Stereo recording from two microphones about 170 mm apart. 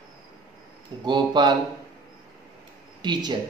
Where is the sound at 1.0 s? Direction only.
25° right (ahead or behind).